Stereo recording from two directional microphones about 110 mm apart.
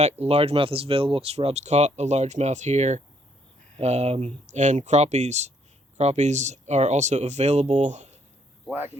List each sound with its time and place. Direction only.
0.0 s speech: 70° right (ahead or behind); by 8.2 s 90° right